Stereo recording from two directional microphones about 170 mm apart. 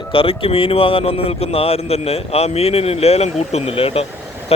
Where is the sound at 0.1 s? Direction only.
35° left (ahead or behind).